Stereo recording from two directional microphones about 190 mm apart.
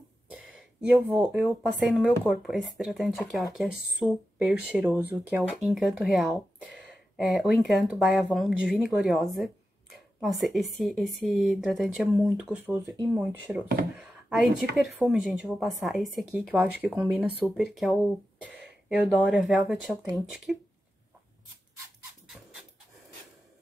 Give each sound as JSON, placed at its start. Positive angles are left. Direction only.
{"t": 0.3, "sound": "speech", "side_deg": -5}
{"t": 19.2, "sound": "speech", "side_deg": 0}